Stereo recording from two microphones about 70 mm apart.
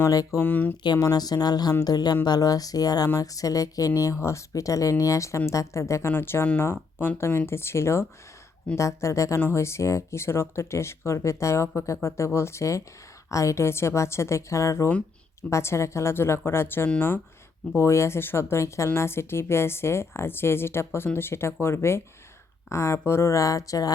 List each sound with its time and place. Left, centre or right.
0.1 s speech: left
0.3 s speech: left
1.1 s speech: left
4.2 s a woman's voice: left
6.1 s a woman's voice: left
17.7 s a woman's voice: left